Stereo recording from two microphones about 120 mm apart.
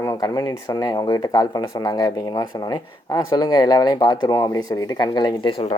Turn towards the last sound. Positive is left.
turn(degrees=35)  # may be behind; listen again after turning